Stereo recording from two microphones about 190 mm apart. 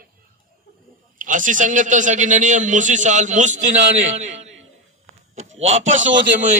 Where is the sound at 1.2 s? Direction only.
45° right (ahead or behind).